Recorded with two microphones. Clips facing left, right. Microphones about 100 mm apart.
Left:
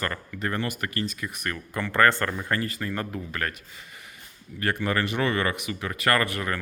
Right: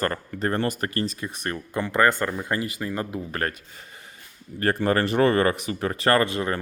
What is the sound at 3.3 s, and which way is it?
Speech, 35° right (ahead or behind).